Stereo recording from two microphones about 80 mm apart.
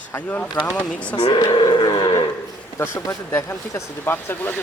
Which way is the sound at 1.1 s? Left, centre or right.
Left.